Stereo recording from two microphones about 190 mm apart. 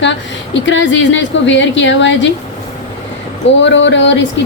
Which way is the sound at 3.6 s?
70° left (ahead or behind).